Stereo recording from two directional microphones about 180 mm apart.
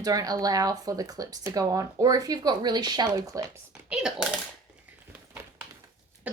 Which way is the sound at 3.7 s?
5° right (ahead or behind).